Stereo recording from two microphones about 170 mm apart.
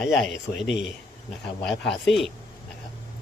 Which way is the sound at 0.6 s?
90° left.